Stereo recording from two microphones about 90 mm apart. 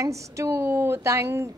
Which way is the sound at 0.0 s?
35° right (ahead or behind).